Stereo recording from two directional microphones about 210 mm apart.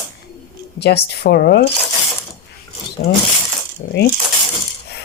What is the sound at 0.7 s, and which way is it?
Speech, 50° left (ahead or behind).